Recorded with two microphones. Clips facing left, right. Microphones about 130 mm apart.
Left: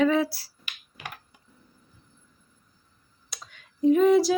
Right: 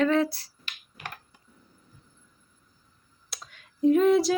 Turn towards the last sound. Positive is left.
turn(degrees=0)  # may be behind; listen again after turning